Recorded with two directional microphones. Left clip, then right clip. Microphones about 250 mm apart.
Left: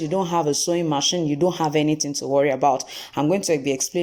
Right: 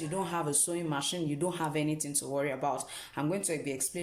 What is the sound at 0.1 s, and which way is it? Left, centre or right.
Speech, left.